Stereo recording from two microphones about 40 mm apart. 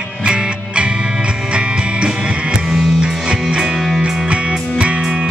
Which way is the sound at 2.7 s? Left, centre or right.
Centre.